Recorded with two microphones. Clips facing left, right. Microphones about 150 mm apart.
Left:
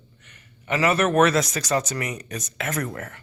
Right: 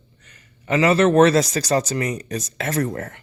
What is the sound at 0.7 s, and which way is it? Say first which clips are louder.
Speech: right 5 dB; 30° right (ahead or behind).